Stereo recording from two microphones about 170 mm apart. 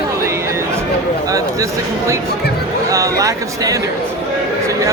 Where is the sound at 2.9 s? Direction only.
20° right (ahead or behind).